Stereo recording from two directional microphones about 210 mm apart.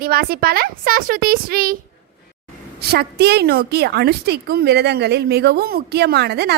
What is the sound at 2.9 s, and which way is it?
A woman's voice, 50° right (ahead or behind).